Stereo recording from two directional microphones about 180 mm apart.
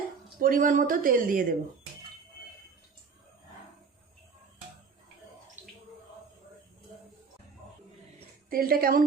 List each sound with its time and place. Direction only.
0.3 s a woman's voice: 50° right (ahead or behind)
5.6 s bathtub: 40° right (ahead or behind)
8.4 s a woman's voice: 55° right (ahead or behind)